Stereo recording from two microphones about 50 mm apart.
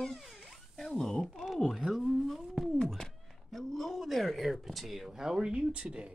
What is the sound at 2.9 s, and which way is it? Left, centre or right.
Speech, centre.